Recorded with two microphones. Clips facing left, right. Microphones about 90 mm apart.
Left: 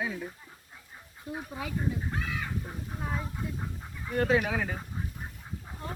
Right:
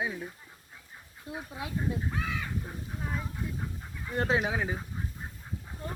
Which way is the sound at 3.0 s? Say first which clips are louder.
Left 2 dB; 5° left (ahead or behind).